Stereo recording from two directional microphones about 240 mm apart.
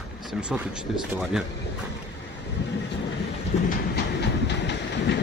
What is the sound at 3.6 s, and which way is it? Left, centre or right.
Train, left.